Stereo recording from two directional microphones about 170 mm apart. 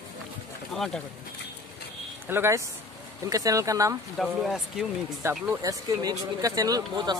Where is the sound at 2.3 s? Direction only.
15° right (ahead or behind).